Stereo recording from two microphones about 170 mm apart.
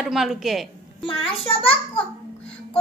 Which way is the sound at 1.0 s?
30° left (ahead or behind).